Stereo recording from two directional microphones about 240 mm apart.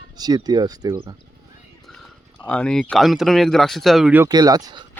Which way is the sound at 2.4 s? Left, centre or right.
Centre.